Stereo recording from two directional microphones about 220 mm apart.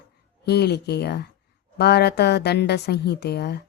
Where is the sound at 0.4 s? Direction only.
50° left (ahead or behind).